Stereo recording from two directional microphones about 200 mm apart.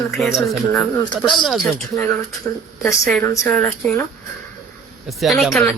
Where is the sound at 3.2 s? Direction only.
10° left (ahead or behind).